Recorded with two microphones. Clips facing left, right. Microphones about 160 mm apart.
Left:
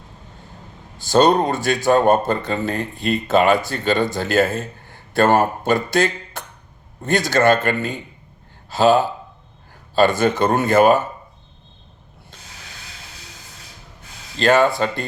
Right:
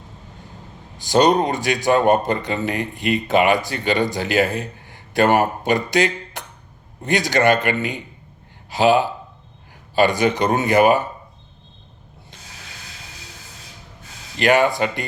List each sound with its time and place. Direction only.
0.9 s a man's voice: 15° right (ahead or behind)
14.3 s speech: 15° right (ahead or behind)